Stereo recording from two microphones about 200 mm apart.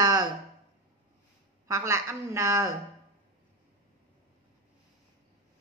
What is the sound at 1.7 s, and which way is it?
Speech, 15° right (ahead or behind).